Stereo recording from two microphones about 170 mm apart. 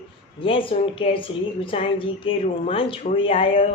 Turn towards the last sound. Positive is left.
turn(degrees=30)  # may be behind; listen again after turning